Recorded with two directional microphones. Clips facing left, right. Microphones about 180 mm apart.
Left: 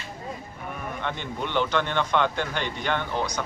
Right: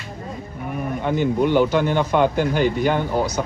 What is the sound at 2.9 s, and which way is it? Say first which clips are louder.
Speech: right 7 dB; 40° right (ahead or behind).